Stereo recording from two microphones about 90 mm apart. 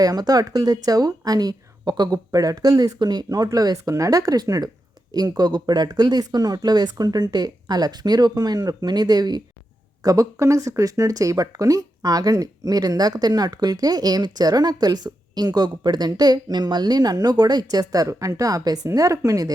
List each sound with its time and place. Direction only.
0.0 s a woman's voice: 45° right (ahead or behind)